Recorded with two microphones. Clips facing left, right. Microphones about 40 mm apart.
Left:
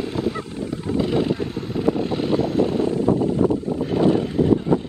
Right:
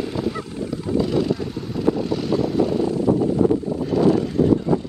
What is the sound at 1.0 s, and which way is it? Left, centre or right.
Vehicle, left.